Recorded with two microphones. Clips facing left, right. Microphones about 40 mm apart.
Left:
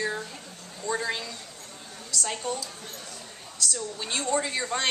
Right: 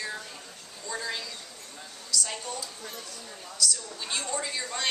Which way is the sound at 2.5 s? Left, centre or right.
Left.